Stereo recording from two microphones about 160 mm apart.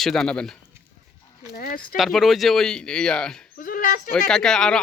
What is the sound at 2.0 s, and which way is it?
Speech, centre (ahead or behind).